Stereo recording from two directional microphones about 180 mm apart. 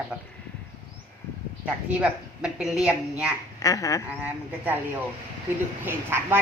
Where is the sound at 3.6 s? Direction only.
20° left (ahead or behind).